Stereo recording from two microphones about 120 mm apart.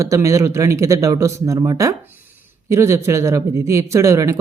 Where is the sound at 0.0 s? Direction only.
25° right (ahead or behind).